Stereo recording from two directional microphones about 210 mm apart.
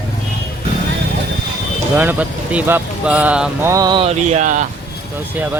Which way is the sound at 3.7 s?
20° right (ahead or behind).